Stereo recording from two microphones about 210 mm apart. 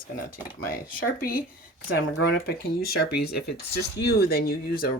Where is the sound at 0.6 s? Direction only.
45° left (ahead or behind).